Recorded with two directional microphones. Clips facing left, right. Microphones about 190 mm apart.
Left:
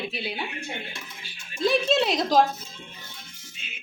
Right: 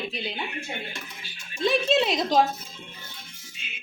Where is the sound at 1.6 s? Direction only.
Centre (ahead or behind).